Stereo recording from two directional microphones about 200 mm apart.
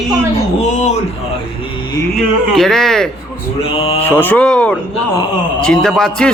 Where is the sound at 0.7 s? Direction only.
35° left (ahead or behind).